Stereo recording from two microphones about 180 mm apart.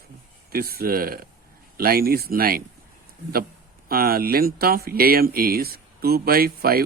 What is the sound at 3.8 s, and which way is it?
Speech, 55° right (ahead or behind).